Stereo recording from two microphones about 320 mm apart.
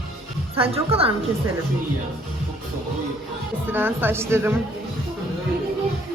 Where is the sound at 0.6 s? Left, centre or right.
Centre.